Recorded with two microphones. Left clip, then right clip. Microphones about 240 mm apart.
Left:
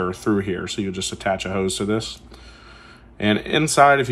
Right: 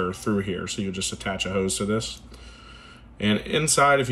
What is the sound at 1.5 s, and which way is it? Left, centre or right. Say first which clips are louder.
Speech: left 2 dB; left.